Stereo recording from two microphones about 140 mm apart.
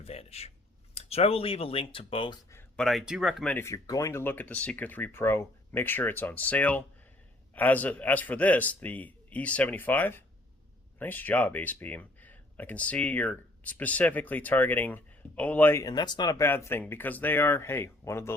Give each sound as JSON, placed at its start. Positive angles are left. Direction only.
{"t": 0.0, "sound": "speech", "side_deg": 45}
{"t": 2.7, "sound": "speech", "side_deg": 0}
{"t": 3.5, "sound": "speech", "side_deg": 20}
{"t": 15.8, "sound": "speech", "side_deg": 30}
{"t": 16.4, "sound": "speech", "side_deg": 20}